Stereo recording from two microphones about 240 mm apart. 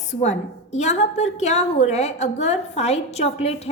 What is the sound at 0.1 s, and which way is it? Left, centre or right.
A woman's voice, left.